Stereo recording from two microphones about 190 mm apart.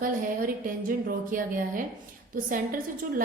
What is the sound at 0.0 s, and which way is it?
A woman's voice, 45° right (ahead or behind).